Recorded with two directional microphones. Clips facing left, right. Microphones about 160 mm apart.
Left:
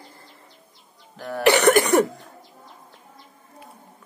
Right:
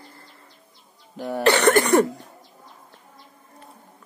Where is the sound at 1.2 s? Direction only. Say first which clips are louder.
Right 3 dB; 20° right (ahead or behind).